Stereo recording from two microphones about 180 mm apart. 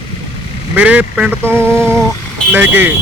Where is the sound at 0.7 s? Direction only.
10° right (ahead or behind).